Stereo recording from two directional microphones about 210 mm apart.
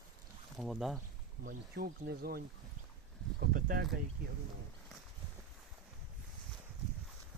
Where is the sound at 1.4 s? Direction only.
45° right (ahead or behind).